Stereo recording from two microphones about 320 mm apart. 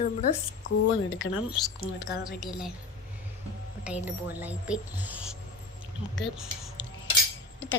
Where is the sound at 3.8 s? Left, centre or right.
Centre.